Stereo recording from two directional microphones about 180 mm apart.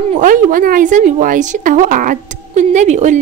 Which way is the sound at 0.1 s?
45° right (ahead or behind).